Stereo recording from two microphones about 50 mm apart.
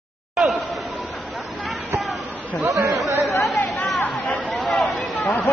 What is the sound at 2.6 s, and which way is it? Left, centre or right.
Speech, right.